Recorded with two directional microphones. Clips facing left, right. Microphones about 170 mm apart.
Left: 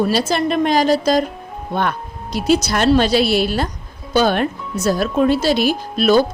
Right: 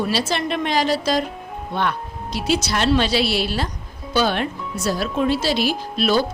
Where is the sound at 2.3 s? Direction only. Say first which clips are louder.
Left 5 dB; 45° left (ahead or behind).